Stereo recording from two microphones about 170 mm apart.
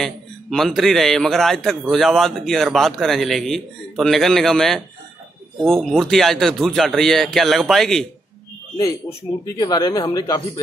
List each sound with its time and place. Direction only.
0.0 s a man's voice: centre (ahead or behind)
9.6 s speech: 25° left (ahead or behind)